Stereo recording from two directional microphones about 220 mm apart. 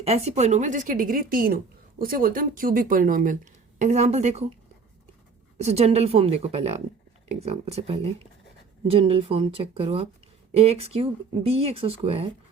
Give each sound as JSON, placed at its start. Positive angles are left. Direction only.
{"t": 0.0, "sound": "speech", "side_deg": -30}
{"t": 5.5, "sound": "speech", "side_deg": -30}